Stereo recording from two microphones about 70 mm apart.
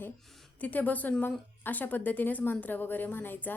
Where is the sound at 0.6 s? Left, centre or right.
Left.